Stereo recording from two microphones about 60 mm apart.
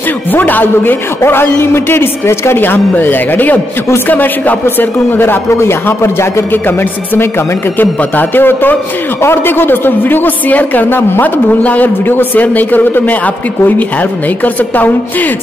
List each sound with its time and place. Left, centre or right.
0.3 s a man's voice: left
2.6 s a man's voice: left
5.5 s a man's voice: left
6.5 s a man's voice: left
14.4 s a woman's voice: left